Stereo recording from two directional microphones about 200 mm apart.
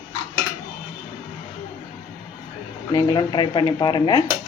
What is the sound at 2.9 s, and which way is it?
Speech, 20° left (ahead or behind).